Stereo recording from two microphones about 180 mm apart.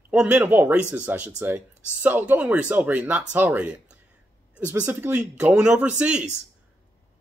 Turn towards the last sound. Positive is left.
turn(degrees=-5)  # may be behind; listen again after turning